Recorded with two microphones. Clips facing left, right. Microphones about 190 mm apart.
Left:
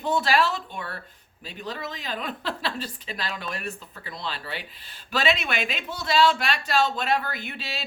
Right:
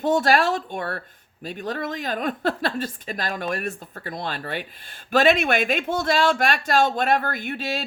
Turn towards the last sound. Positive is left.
turn(degrees=-45)  # may be behind; listen again after turning